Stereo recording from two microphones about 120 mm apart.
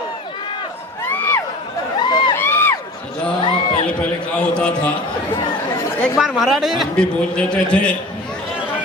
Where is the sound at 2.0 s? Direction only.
40° left (ahead or behind).